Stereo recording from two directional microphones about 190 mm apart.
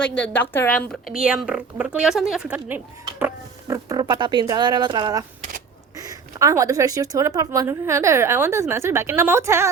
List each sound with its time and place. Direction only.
0.2 s a woman's voice: 10° left (ahead or behind); by 9.6 s 15° right (ahead or behind)